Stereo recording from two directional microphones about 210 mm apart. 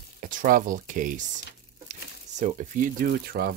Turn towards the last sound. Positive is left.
turn(degrees=-45)  # may be behind; listen again after turning